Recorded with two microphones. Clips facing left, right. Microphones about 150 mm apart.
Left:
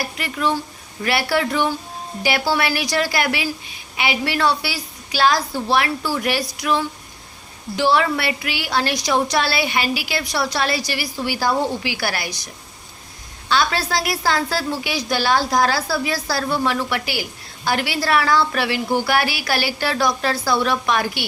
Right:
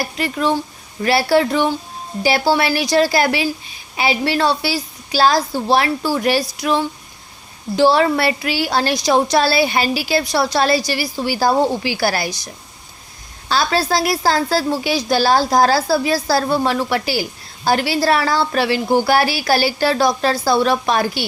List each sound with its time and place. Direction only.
0.0 s a woman's voice: 30° right (ahead or behind)
13.5 s a woman's voice: 35° right (ahead or behind)